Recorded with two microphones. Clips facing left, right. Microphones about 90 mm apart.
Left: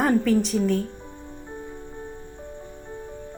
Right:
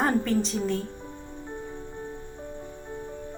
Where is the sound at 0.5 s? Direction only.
10° right (ahead or behind).